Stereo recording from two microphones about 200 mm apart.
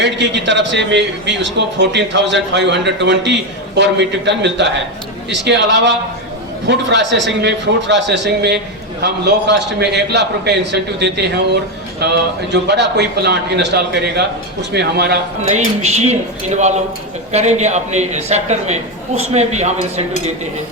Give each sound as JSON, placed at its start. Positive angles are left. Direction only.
{"t": 0.0, "sound": "a man's voice", "side_deg": -65}
{"t": 15.4, "sound": "a man's voice", "side_deg": -35}